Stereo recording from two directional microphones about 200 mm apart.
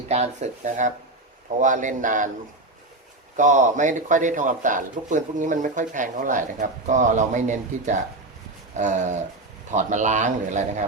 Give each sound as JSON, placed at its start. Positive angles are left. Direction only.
{"t": 0.1, "sound": "a man's voice", "side_deg": -35}
{"t": 3.3, "sound": "a man's voice", "side_deg": -40}
{"t": 8.7, "sound": "a sound", "side_deg": -35}
{"t": 9.7, "sound": "a man's voice", "side_deg": -35}